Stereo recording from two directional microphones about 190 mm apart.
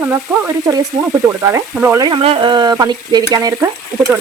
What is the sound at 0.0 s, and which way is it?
Stir, 10° right (ahead or behind).